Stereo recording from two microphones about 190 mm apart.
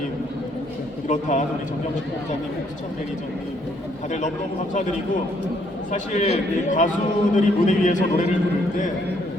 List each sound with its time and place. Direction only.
1.0 s a man's voice: 40° left (ahead or behind)
4.7 s a man's voice: 40° left (ahead or behind)